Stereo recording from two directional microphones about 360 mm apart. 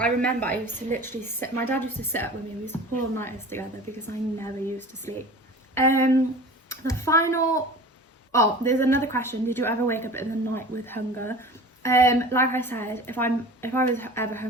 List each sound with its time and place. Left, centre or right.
0.0 s a woman's voice: centre